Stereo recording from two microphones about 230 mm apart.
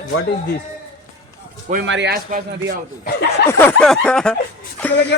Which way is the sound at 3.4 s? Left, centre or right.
Centre.